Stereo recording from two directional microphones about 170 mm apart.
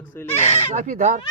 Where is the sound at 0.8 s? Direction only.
45° right (ahead or behind).